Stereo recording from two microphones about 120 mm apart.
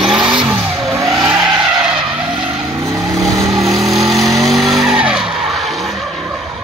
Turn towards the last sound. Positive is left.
turn(degrees=-5)  # may be behind; listen again after turning